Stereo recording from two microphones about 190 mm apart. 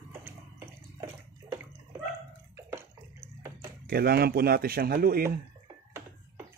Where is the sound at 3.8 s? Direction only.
55° right (ahead or behind).